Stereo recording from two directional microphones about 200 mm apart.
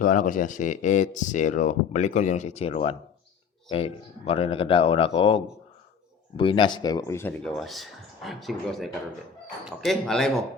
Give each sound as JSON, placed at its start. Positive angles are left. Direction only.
{"t": 0.0, "sound": "speech", "side_deg": 40}